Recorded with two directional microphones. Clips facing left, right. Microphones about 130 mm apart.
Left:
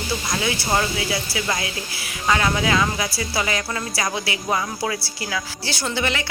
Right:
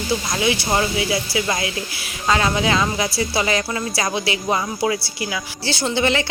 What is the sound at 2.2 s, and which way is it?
Speech, 25° right (ahead or behind).